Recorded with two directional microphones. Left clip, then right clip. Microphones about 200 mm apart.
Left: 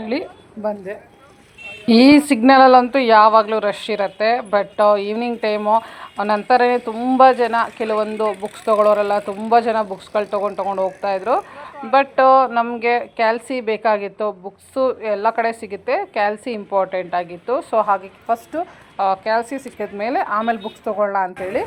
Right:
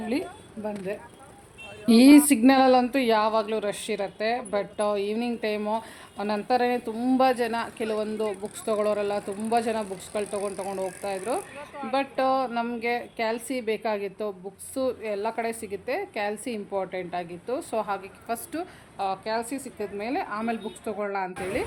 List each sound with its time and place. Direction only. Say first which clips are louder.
0.0 s a woman's voice: left 6 dB; 5° left (ahead or behind)
1.8 s speech: left 5 dB; centre (ahead or behind)
8.3 s speech: left 9 dB; 25° left (ahead or behind)
8.6 s a woman's voice: left 11 dB; centre (ahead or behind)